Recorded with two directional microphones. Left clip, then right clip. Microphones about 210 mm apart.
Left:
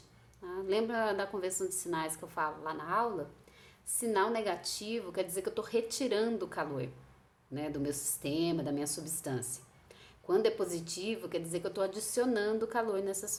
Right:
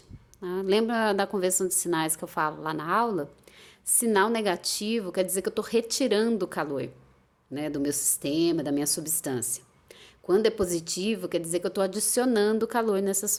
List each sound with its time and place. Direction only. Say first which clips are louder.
0.4 s a woman's voice: right 8 dB; 45° right (ahead or behind)